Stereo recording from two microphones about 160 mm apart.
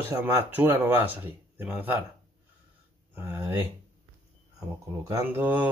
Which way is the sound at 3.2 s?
15° right (ahead or behind).